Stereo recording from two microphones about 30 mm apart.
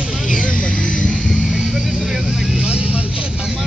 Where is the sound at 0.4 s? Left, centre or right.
Left.